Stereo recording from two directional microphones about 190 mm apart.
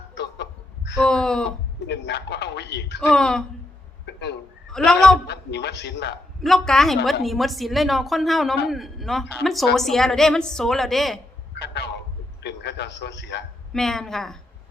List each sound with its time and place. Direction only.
0.1 s a sound: 65° left (ahead or behind)
0.9 s a woman's voice: 5° left (ahead or behind)
1.9 s speech: 60° left (ahead or behind)
3.0 s a woman's voice: 5° left (ahead or behind)
4.0 s a sound: 65° left (ahead or behind)
4.7 s a woman's voice: 5° left (ahead or behind)
5.2 s speech: 60° left (ahead or behind)
6.4 s a woman's voice: centre (ahead or behind)
11.5 s a sound: 60° left (ahead or behind)
13.7 s a woman's voice: centre (ahead or behind)